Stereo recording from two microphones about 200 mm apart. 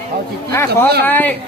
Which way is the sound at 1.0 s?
10° left (ahead or behind).